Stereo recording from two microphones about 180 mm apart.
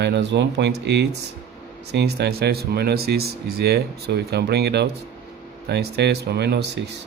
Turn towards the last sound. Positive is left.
turn(degrees=-65)  # may be behind; listen again after turning